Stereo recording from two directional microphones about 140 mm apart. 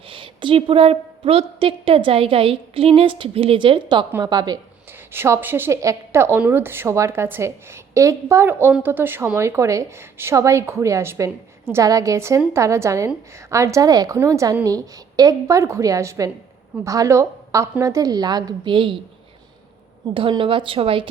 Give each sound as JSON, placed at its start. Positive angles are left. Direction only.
{"t": 0.1, "sound": "a woman's voice", "side_deg": -35}
{"t": 4.9, "sound": "a woman's voice", "side_deg": -15}
{"t": 20.1, "sound": "a woman's voice", "side_deg": -40}